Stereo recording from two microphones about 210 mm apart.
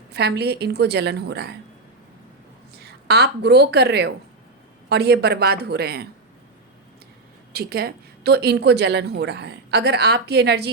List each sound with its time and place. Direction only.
0.1 s a woman's voice: 50° right (ahead or behind)
3.1 s a woman's voice: 50° right (ahead or behind)
7.5 s a woman's voice: 50° right (ahead or behind)